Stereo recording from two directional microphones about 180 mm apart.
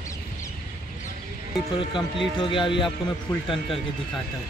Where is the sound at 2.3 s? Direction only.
25° left (ahead or behind).